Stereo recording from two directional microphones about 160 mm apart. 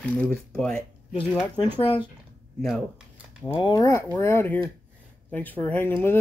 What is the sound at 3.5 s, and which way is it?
Speech, 25° left (ahead or behind).